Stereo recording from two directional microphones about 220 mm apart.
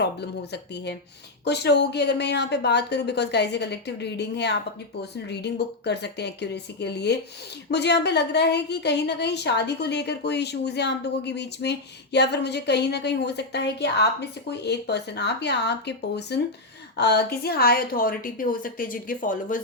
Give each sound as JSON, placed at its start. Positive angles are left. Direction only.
{"t": 0.0, "sound": "a woman's voice", "side_deg": 50}